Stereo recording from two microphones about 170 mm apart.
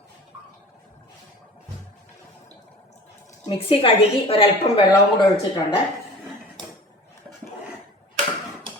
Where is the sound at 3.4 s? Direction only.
30° left (ahead or behind).